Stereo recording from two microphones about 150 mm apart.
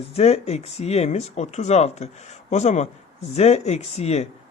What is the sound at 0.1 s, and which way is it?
Speech, 45° left (ahead or behind).